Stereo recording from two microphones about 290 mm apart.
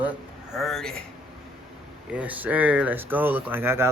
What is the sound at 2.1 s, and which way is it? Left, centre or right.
Speech, centre.